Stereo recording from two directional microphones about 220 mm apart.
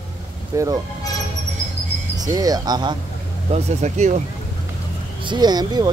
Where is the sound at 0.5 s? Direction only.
15° right (ahead or behind).